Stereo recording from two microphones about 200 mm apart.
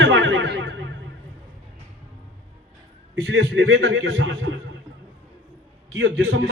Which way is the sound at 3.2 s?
60° right (ahead or behind).